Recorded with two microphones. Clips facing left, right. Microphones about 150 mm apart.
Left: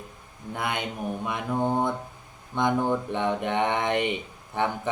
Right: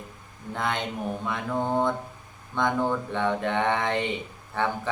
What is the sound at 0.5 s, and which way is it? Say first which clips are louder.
Mantra: right 1 dB; 10° left (ahead or behind).